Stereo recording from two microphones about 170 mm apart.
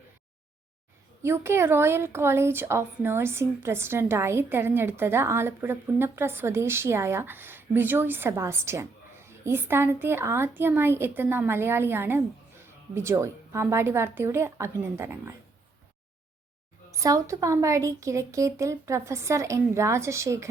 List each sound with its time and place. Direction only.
1.2 s a woman's voice: 15° right (ahead or behind)
16.9 s a woman's voice: 20° right (ahead or behind)